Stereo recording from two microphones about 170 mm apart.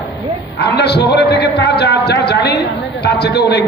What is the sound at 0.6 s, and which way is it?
A man's voice, 80° left.